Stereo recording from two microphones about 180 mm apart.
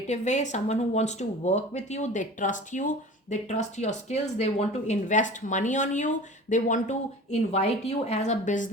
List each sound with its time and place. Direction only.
0.1 s speech: 40° left (ahead or behind)